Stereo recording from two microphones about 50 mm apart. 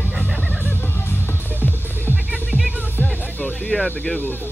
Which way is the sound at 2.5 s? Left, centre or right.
Centre.